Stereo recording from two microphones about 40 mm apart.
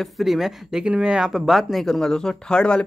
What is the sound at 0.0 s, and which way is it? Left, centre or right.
Speech, centre.